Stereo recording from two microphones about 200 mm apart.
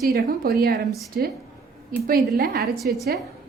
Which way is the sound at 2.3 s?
50° right (ahead or behind).